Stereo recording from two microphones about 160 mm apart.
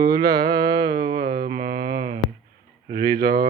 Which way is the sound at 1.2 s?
75° right (ahead or behind).